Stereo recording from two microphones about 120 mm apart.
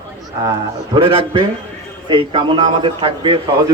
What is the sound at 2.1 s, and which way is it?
A man's voice, 45° right (ahead or behind).